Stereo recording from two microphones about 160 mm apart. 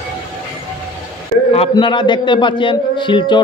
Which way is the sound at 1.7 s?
30° left (ahead or behind).